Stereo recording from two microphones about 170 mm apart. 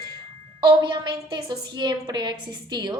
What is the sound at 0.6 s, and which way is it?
A woman's voice, 25° right (ahead or behind).